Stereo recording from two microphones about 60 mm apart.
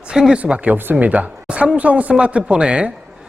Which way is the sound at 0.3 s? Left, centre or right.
Right.